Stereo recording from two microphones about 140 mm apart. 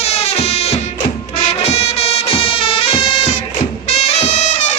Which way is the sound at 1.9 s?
45° left (ahead or behind).